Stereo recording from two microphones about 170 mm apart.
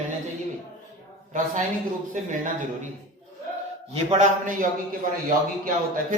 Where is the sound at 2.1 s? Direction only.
45° right (ahead or behind).